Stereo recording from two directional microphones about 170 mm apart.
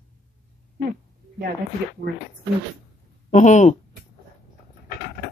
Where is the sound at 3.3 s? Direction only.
45° left (ahead or behind).